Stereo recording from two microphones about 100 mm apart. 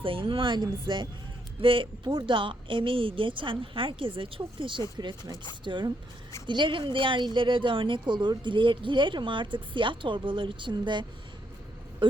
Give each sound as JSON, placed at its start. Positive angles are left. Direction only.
{"t": 0.0, "sound": "speech", "side_deg": -60}
{"t": 4.9, "sound": "speech", "side_deg": -45}